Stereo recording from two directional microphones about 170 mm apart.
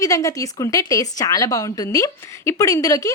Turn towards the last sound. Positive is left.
turn(degrees=20)  # may be behind; listen again after turning